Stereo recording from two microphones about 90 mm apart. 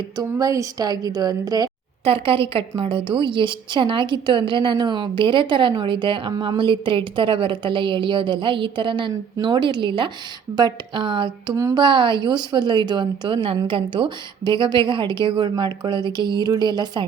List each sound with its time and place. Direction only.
0.2 s a woman's voice: 45° right (ahead or behind)
2.0 s a woman's voice: 80° right
3.2 s a woman's voice: 65° right (ahead or behind)
6.3 s a woman's voice: 55° right (ahead or behind)